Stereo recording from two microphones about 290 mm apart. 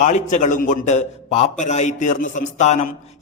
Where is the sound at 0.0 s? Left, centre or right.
Left.